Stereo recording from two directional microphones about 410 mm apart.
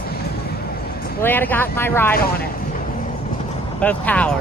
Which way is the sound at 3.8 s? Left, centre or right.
Centre.